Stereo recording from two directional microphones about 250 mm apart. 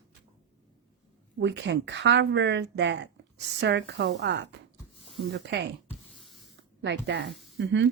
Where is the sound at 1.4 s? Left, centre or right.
Right.